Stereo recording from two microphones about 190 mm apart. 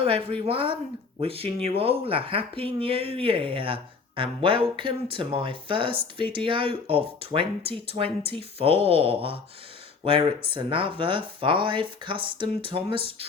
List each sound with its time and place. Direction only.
0.0 s speech: 30° right (ahead or behind)